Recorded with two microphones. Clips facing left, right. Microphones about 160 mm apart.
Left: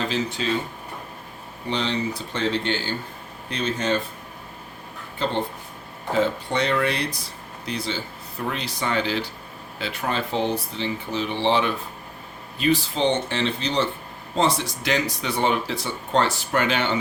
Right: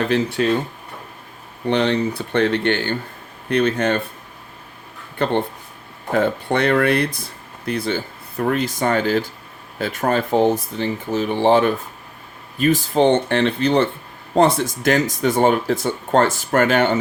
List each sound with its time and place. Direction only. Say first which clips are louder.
0.0 s speech: right 7 dB; 60° right (ahead or behind)
1.6 s speech: right 7 dB; 60° right (ahead or behind)
5.1 s speech: right 5 dB; 60° right (ahead or behind)